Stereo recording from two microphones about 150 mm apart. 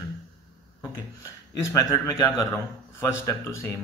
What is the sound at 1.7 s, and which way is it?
Speech, 25° left (ahead or behind).